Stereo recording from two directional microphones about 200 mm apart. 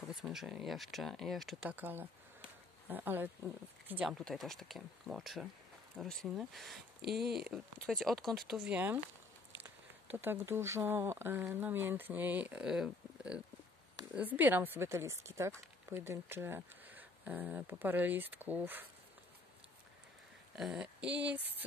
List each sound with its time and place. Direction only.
0.1 s speech: centre (ahead or behind)
7.0 s speech: 50° right (ahead or behind)
7.4 s speech: centre (ahead or behind)
10.1 s speech: 10° right (ahead or behind)
20.5 s speech: 5° right (ahead or behind)